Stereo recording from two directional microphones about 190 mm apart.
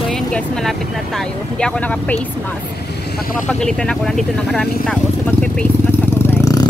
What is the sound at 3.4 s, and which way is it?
Vehicle, 5° left (ahead or behind).